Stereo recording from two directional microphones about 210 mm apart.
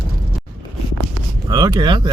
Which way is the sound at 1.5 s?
20° right (ahead or behind).